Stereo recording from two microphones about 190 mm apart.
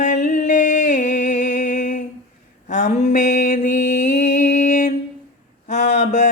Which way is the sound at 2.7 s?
40° left (ahead or behind).